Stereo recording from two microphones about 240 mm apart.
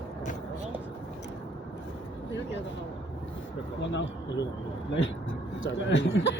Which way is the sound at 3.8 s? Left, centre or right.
Left.